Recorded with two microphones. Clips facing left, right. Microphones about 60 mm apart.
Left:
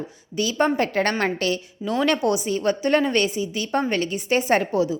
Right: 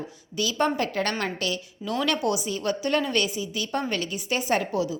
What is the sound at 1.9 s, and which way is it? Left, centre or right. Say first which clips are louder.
A woman's voice: left 4 dB; left.